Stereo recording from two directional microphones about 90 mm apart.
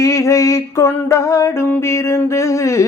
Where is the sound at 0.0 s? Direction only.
35° left (ahead or behind).